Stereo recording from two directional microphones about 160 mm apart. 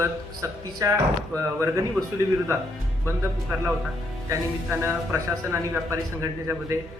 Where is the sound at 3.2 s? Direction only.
15° right (ahead or behind).